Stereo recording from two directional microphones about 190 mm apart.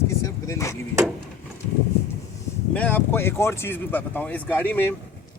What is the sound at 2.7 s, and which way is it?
Speech, 10° left (ahead or behind).